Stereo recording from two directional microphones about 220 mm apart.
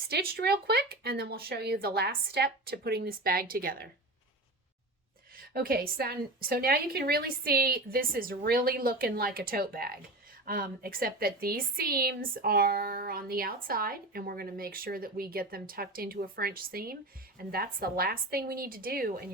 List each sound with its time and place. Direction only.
0.1 s a woman's voice: 45° right (ahead or behind)
5.4 s a woman's voice: 45° right (ahead or behind)